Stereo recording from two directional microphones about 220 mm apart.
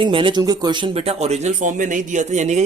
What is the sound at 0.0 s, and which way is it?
Speech, 20° right (ahead or behind).